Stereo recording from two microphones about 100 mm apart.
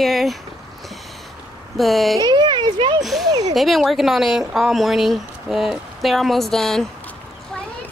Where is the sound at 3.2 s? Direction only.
40° right (ahead or behind).